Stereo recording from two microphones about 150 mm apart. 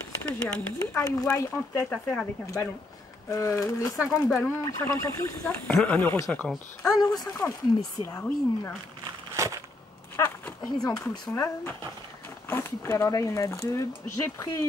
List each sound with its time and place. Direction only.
0.4 s speech: 5° left (ahead or behind)
1.0 s speech: 20° left (ahead or behind)
3.9 s speech: centre (ahead or behind)
4.4 s speech: 15° left (ahead or behind)
5.4 s speech: 5° left (ahead or behind)
7.0 s speech: 25° left (ahead or behind)
10.1 s a sound: 15° left (ahead or behind)
11.3 s speech: 20° left (ahead or behind)